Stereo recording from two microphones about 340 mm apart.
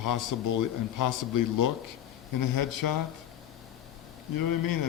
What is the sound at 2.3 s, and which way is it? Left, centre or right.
Speech, left.